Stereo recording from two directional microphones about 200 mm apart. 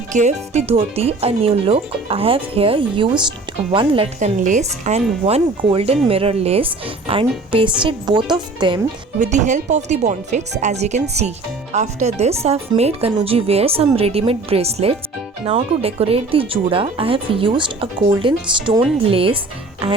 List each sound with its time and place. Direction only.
0.1 s speech: 35° right (ahead or behind)
9.2 s speech: 35° right (ahead or behind)